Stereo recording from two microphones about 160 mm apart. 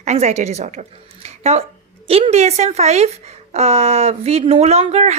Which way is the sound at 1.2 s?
40° right (ahead or behind).